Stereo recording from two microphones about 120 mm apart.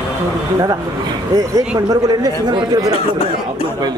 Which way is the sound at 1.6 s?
30° right (ahead or behind).